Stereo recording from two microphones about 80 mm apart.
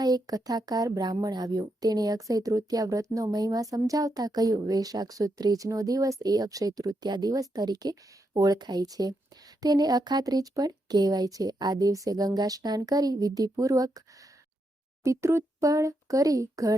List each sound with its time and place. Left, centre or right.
0.0 s speech: right